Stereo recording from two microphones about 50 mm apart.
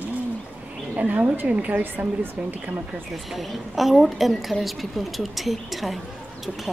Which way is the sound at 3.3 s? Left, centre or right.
Centre.